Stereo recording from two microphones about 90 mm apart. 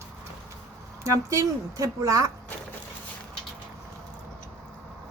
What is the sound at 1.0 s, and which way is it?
A woman's voice, 35° right (ahead or behind).